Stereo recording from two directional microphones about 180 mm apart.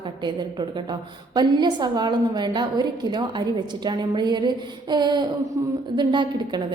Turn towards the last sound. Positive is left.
turn(degrees=-25)  # may be behind; listen again after turning